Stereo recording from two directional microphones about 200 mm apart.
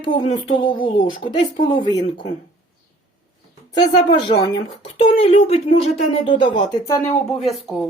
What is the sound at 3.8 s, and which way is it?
Speech, 20° left (ahead or behind).